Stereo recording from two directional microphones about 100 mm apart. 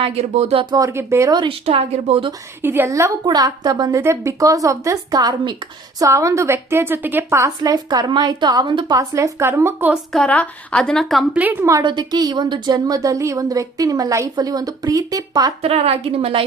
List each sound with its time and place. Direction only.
0.0 s a woman's voice: 90° right
0.8 s a woman's voice: 25° right (ahead or behind)
1.5 s speech: 80° right
2.6 s a woman's voice: 25° right (ahead or behind)
3.2 s a woman's voice: 40° right (ahead or behind)
6.0 s a woman's voice: 30° right (ahead or behind); by 9.0 s 50° right (ahead or behind)
9.0 s a woman's voice: 30° right (ahead or behind)
9.9 s a woman's voice: 5° left (ahead or behind)
10.3 s a woman's voice: 15° left (ahead or behind)
11.8 s a woman's voice: 50° right (ahead or behind)
15.6 s a woman's voice: 90° right